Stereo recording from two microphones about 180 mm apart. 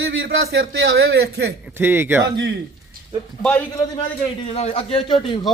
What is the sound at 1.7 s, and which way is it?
Speech, 10° right (ahead or behind).